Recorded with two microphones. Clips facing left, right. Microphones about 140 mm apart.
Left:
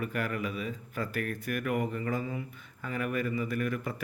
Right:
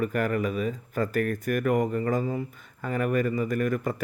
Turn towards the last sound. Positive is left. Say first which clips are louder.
# right 6 dB
turn(degrees=-45)  # may be behind; listen again after turning